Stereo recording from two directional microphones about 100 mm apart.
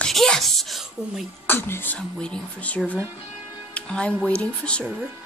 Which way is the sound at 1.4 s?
20° left (ahead or behind).